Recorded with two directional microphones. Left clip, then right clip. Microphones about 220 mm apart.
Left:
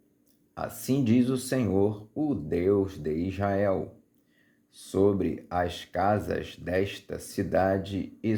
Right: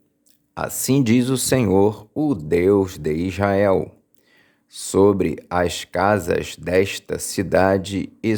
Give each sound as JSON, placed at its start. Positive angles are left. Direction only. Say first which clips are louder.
{"t": 0.5, "sound": "speech", "louder": "right 9 dB", "side_deg": -30}